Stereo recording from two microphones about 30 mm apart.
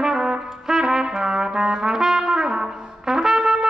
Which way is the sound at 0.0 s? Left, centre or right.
Right.